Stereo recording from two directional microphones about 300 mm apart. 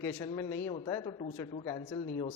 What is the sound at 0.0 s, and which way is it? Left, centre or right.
Speech, centre.